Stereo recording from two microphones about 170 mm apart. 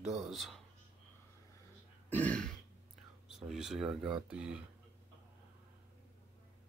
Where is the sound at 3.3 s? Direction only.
5° right (ahead or behind).